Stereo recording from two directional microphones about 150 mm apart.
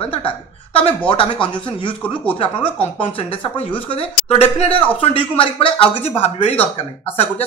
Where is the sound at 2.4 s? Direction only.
35° left (ahead or behind).